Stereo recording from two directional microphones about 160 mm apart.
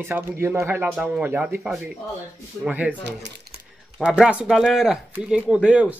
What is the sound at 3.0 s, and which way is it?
Speech, 90° right.